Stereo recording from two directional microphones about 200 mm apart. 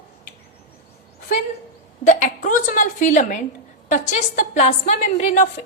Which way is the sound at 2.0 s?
40° left (ahead or behind).